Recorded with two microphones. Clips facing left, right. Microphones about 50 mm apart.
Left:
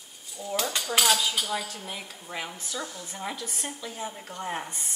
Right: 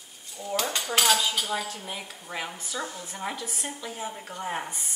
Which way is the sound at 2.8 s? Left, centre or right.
Centre.